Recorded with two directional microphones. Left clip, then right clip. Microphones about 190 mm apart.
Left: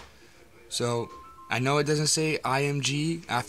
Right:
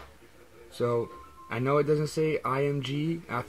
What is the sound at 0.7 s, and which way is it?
Speech, 25° left (ahead or behind).